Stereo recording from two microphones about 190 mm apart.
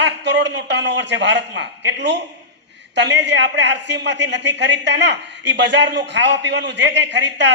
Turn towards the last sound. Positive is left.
turn(degrees=-65)  # may be behind; listen again after turning